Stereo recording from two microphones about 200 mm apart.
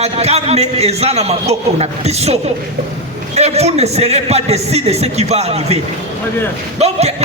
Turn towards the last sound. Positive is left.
turn(degrees=-30)  # may be behind; listen again after turning